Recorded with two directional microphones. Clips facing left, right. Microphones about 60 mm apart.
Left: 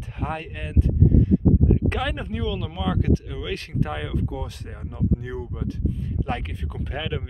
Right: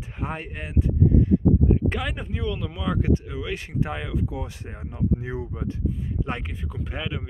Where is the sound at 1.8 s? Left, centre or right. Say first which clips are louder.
Left 2 dB; centre.